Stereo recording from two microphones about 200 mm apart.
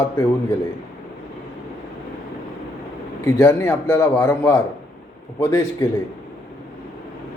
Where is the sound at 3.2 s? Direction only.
10° left (ahead or behind).